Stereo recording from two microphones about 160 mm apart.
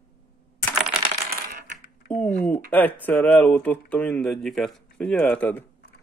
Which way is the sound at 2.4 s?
10° left (ahead or behind).